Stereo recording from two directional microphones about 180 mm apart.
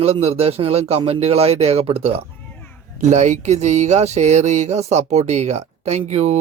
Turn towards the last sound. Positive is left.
turn(degrees=-40)  # may be behind; listen again after turning